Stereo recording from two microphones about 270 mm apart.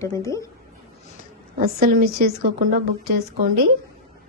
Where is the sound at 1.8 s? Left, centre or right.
Right.